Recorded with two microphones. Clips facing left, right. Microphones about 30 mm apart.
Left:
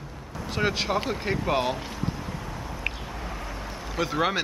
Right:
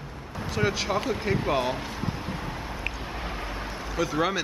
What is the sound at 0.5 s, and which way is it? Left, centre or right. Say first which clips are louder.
Speech: left 1 dB; centre.